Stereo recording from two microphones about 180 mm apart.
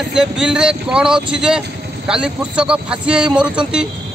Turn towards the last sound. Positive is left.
turn(degrees=-5)  # may be behind; listen again after turning